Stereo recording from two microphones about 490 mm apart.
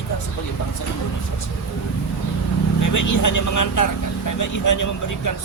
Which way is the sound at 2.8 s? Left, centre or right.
Left.